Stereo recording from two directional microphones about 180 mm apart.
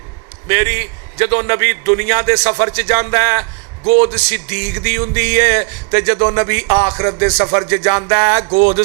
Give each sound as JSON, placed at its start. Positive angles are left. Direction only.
{"t": 0.4, "sound": "a man's voice", "side_deg": -20}
{"t": 4.1, "sound": "a sound", "side_deg": -15}
{"t": 6.1, "sound": "a man's voice", "side_deg": -30}
{"t": 7.3, "sound": "music", "side_deg": -30}
{"t": 7.7, "sound": "a man's voice", "side_deg": -20}